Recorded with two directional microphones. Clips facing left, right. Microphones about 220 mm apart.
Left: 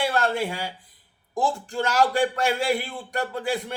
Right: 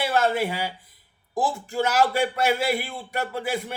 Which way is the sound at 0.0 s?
5° right (ahead or behind).